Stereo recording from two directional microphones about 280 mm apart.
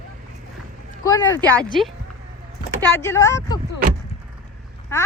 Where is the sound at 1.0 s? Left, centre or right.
Centre.